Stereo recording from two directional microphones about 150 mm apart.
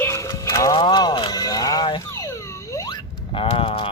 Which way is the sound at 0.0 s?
20° left (ahead or behind).